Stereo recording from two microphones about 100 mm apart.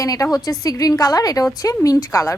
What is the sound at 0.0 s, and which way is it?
A woman's voice, 35° left (ahead or behind).